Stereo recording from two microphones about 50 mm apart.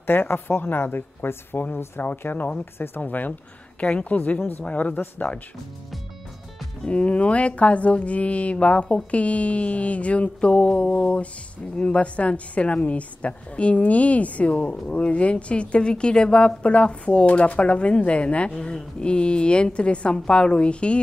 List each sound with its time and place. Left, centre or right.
0.0 s speech: left
2.6 s speech: left
3.0 s a woman's voice: left
6.9 s a woman's voice: left